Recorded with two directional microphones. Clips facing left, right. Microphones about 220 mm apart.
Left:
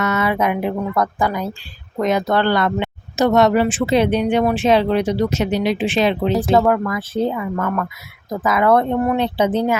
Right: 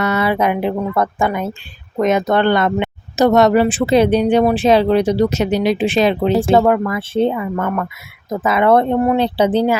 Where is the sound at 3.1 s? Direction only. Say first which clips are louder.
Right 3 dB; 40° right (ahead or behind).